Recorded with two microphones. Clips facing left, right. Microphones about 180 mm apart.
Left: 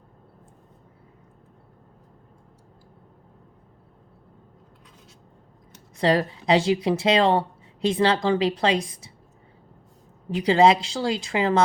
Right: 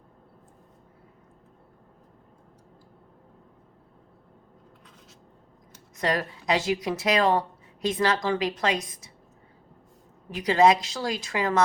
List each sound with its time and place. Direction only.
6.0 s speech: 30° left (ahead or behind)
10.2 s speech: 30° left (ahead or behind)